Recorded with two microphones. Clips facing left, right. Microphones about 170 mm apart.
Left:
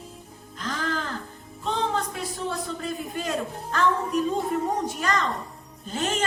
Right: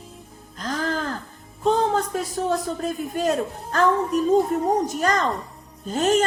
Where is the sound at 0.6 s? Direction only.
40° right (ahead or behind).